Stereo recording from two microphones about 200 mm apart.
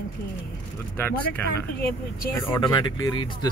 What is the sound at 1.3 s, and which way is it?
Speech, 50° left (ahead or behind).